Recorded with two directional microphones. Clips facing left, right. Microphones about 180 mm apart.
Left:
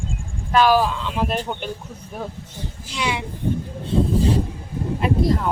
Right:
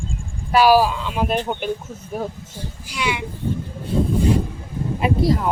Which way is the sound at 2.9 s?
30° left (ahead or behind).